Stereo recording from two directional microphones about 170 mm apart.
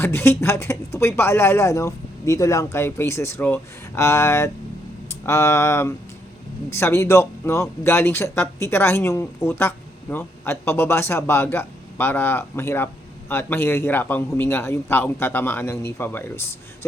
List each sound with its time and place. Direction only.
0.0 s speech: 15° left (ahead or behind)